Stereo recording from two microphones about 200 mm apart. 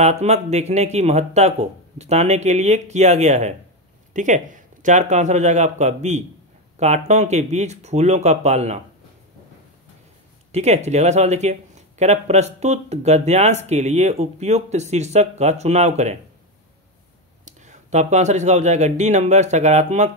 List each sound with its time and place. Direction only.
0.0 s speech: 35° right (ahead or behind)
10.5 s speech: 35° right (ahead or behind)
17.5 s speech: 35° right (ahead or behind)